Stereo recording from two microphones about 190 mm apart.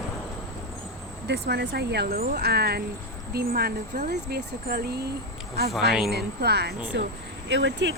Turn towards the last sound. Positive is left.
turn(degrees=-70)  # may be behind; listen again after turning